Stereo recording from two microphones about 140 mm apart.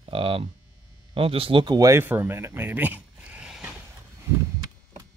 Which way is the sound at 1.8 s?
20° right (ahead or behind).